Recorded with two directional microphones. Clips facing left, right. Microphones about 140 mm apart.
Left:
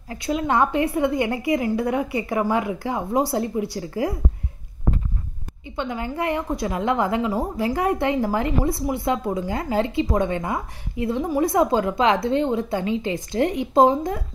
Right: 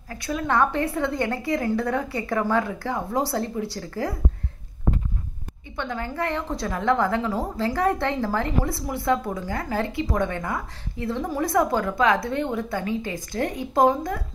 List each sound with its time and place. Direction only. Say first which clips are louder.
0.1 s a woman's voice: left 3 dB; 20° left (ahead or behind)
5.8 s a woman's voice: left 2 dB; 15° left (ahead or behind)